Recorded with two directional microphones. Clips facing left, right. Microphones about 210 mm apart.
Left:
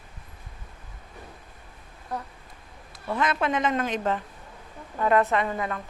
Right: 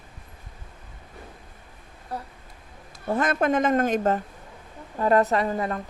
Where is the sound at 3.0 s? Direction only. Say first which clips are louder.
Right 3 dB; 45° right (ahead or behind).